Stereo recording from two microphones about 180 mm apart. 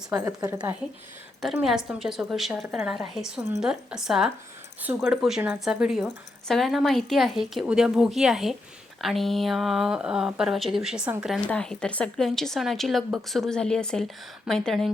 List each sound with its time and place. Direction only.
0.1 s a woman's voice: 15° right (ahead or behind)
1.6 s a woman's voice: centre (ahead or behind)
11.4 s a woman's voice: 5° left (ahead or behind)